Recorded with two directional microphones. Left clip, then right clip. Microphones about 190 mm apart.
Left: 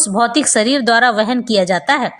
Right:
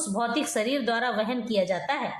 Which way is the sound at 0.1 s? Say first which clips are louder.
Left 12 dB; 40° left (ahead or behind).